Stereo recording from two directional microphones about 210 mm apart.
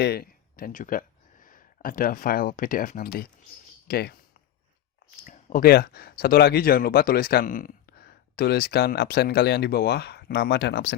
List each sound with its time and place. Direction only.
0.0 s speech: 50° left (ahead or behind)
5.2 s speech: 40° left (ahead or behind)